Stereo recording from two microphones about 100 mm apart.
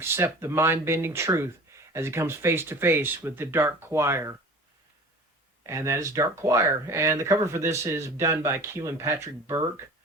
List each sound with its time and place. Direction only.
0.0 s speech: 25° right (ahead or behind)
5.6 s speech: 30° right (ahead or behind)